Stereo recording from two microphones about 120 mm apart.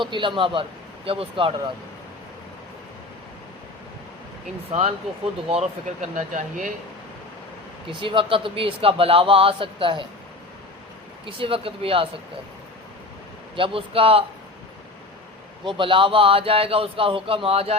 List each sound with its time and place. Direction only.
0.0 s speech: 45° right (ahead or behind)
4.7 s speech: 70° right (ahead or behind); by 6.7 s 90° right
7.9 s speech: 45° right (ahead or behind)
11.3 s speech: 50° right (ahead or behind)
13.6 s speech: 50° right (ahead or behind)
15.6 s speech: 45° right (ahead or behind)